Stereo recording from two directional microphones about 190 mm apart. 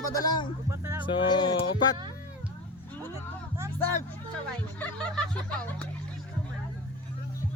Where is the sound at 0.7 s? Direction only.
15° right (ahead or behind).